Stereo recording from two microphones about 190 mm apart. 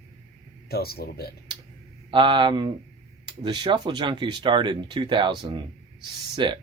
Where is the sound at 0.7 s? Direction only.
55° left (ahead or behind).